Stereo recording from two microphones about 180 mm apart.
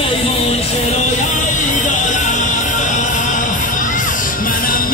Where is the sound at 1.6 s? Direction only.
45° left (ahead or behind).